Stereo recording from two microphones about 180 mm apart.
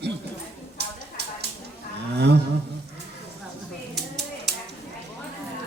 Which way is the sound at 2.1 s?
65° right (ahead or behind).